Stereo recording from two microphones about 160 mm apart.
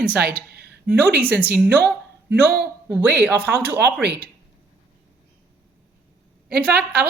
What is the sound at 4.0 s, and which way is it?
Speech, 90° right.